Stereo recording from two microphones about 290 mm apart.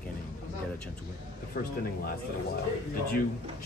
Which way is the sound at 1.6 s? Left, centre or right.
Left.